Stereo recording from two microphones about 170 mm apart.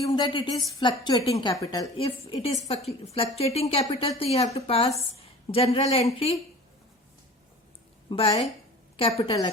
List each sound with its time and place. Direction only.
0.1 s a woman's voice: 25° left (ahead or behind)
8.1 s a woman's voice: 30° left (ahead or behind)